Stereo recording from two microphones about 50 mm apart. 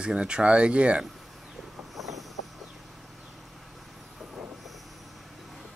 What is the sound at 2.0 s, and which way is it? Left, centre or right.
Vehicle, centre.